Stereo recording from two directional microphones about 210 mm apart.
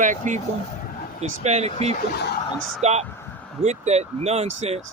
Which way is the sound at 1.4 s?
30° right (ahead or behind).